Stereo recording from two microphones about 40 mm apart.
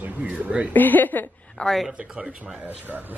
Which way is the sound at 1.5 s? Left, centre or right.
Centre.